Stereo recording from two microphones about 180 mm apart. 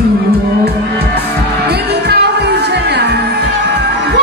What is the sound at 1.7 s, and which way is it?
Music, 65° right (ahead or behind).